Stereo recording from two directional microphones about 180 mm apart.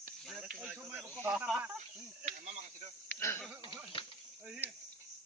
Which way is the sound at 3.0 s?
15° left (ahead or behind).